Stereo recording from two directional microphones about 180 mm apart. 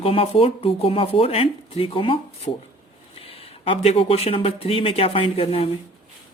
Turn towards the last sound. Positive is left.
turn(degrees=35)  # may be behind; listen again after turning